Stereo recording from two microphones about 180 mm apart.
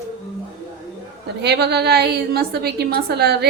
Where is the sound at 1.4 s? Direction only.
65° right (ahead or behind).